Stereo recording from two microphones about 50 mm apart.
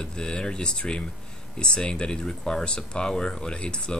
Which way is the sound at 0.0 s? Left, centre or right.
Centre.